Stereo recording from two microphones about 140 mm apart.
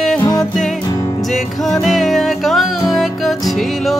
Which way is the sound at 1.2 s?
Centre (ahead or behind).